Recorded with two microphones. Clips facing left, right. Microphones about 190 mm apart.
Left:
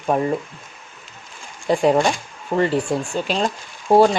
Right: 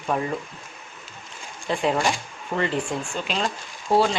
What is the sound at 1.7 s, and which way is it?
Speech, 40° left (ahead or behind).